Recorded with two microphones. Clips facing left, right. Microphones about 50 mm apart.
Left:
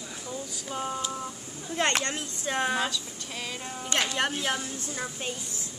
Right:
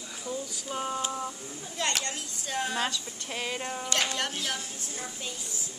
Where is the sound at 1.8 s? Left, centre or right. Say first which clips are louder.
Left 5 dB; left.